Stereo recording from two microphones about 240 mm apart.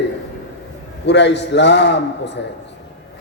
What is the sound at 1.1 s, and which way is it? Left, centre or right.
Speech, left.